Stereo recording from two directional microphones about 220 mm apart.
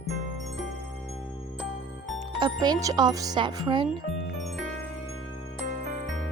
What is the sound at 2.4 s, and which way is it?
Speech, 20° right (ahead or behind).